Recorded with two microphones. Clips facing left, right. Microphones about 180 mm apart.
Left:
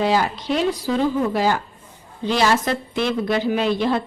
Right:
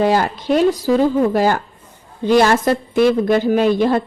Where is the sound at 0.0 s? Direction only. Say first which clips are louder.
Right 4 dB; 50° right (ahead or behind).